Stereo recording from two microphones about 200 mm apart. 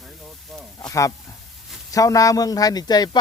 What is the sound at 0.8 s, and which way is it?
Speech, 15° left (ahead or behind).